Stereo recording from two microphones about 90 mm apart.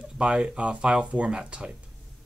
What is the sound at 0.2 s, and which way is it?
Speech, 10° right (ahead or behind).